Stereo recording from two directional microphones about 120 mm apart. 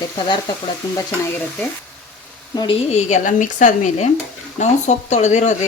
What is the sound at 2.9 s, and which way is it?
A woman's voice, 75° left (ahead or behind).